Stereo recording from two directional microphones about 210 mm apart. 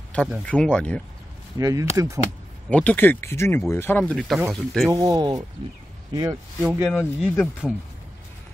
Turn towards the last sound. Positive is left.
turn(degrees=0)  # may be behind; listen again after turning